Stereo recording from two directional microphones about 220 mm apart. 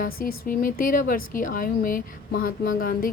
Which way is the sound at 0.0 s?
40° left (ahead or behind).